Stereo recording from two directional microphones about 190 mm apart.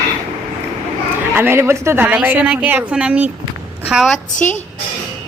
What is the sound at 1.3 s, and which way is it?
A woman's voice, 10° right (ahead or behind).